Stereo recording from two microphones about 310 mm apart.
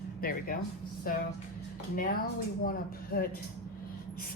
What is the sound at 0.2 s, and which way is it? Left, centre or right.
Speech, left.